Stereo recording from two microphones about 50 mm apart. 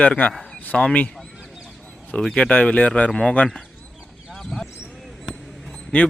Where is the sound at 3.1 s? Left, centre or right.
Centre.